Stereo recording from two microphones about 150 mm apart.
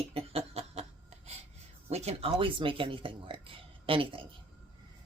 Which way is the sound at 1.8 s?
45° right (ahead or behind).